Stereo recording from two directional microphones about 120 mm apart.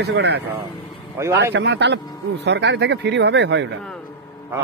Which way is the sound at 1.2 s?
25° right (ahead or behind).